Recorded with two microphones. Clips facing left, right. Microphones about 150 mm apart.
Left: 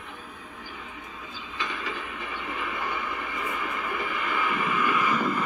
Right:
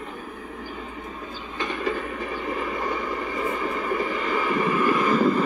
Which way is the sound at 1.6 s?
45° right (ahead or behind).